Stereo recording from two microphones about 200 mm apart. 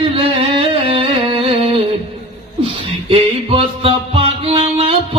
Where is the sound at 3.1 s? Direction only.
30° right (ahead or behind).